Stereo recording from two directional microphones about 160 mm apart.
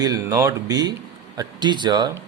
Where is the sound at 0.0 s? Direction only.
20° right (ahead or behind).